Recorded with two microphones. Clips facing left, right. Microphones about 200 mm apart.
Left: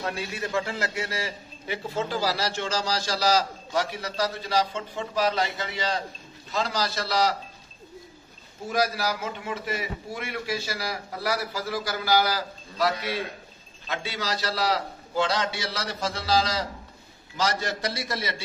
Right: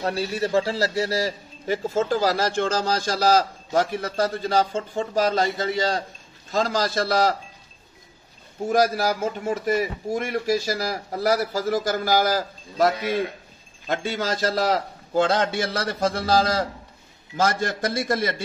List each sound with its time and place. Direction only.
0.0 s a man's voice: 35° right (ahead or behind)
8.6 s a man's voice: 50° right (ahead or behind)